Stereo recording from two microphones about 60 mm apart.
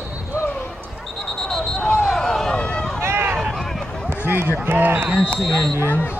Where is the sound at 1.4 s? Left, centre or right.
Centre.